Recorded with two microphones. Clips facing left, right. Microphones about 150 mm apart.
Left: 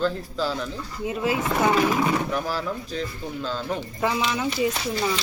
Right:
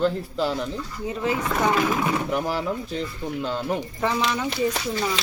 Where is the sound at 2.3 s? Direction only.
20° right (ahead or behind).